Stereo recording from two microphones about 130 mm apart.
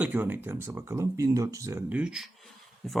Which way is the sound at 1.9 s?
10° right (ahead or behind).